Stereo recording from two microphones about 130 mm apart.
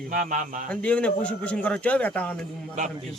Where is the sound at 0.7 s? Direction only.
10° left (ahead or behind).